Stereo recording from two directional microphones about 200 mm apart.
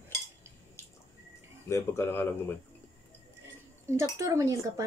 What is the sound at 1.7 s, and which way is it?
Speech, 15° left (ahead or behind).